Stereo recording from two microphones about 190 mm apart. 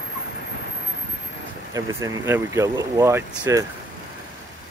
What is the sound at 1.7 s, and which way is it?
Speech, 15° right (ahead or behind).